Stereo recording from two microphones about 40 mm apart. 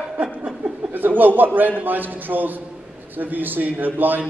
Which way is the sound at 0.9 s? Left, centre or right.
Right.